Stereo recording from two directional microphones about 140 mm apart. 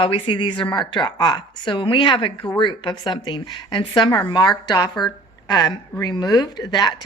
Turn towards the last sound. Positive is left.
turn(degrees=30)  # may be behind; listen again after turning